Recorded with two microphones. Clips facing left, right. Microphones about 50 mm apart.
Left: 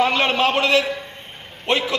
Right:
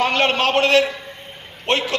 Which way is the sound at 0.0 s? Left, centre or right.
Right.